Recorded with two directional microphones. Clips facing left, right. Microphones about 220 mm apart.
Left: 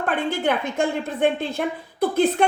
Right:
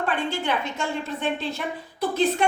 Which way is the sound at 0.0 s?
55° left (ahead or behind).